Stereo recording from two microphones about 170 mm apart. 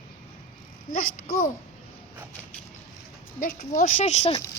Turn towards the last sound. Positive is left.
turn(degrees=40)  # may be behind; listen again after turning